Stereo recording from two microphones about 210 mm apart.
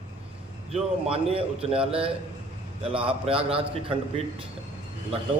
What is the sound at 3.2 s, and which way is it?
Speech, 25° right (ahead or behind).